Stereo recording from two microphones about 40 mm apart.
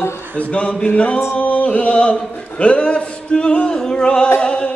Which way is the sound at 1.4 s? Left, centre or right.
Left.